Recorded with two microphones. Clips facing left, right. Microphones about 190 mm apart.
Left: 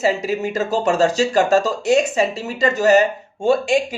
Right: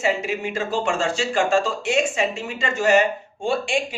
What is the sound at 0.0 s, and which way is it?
Speech, 40° left (ahead or behind).